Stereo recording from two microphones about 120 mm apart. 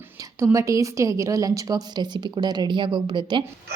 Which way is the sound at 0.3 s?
25° right (ahead or behind).